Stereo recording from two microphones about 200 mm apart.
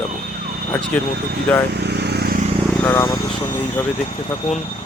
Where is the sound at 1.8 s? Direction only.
55° right (ahead or behind).